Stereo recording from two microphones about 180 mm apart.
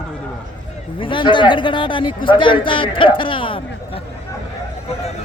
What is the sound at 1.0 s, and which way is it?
A man's voice, 25° left (ahead or behind).